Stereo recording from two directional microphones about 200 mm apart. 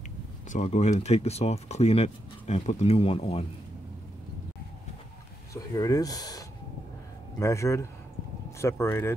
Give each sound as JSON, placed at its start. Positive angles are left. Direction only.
{"t": 0.5, "sound": "speech", "side_deg": 35}
{"t": 5.5, "sound": "speech", "side_deg": 15}